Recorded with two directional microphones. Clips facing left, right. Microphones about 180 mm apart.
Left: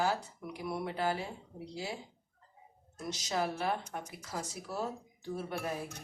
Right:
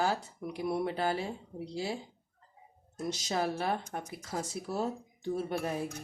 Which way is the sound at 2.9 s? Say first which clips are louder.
Right 2 dB; 35° right (ahead or behind).